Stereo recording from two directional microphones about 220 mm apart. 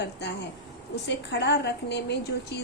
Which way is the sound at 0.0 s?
50° left (ahead or behind).